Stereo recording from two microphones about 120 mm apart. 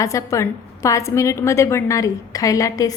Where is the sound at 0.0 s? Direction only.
25° left (ahead or behind).